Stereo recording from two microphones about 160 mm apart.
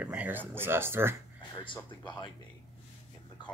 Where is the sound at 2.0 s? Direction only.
30° left (ahead or behind).